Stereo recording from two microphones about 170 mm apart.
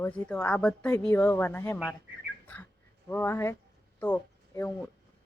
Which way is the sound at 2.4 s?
10° left (ahead or behind).